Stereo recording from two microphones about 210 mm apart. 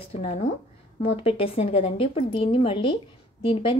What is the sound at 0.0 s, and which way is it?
A woman's voice, 30° left (ahead or behind).